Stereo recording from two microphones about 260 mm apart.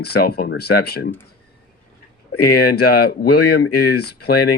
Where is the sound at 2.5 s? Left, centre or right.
Left.